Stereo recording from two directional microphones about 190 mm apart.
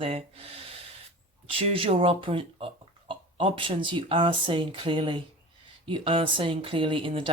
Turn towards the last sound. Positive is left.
turn(degrees=-25)  # may be behind; listen again after turning